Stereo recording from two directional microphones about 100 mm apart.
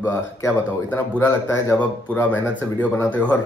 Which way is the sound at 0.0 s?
20° left (ahead or behind).